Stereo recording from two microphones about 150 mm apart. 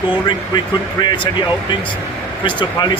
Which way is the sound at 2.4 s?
30° left (ahead or behind).